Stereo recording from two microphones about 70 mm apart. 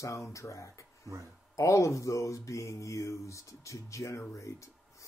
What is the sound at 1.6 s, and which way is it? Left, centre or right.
Mantra, left.